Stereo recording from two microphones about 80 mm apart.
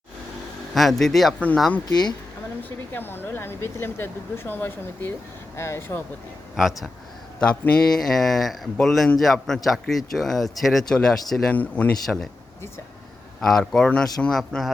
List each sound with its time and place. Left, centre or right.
0.7 s speech: centre
1.9 s speech: left
2.6 s speech: left
7.3 s speech: centre
8.0 s speech: centre
11.5 s speech: left
12.0 s speech: centre
13.4 s speech: centre
14.3 s speech: centre